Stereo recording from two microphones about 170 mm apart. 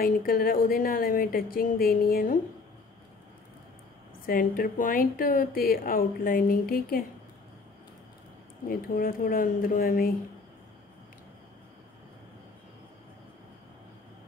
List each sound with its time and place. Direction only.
0.0 s speech: 60° left (ahead or behind)
4.3 s speech: 55° left (ahead or behind)
8.6 s speech: 55° left (ahead or behind)